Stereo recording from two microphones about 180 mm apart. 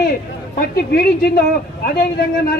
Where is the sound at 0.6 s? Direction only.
60° left (ahead or behind).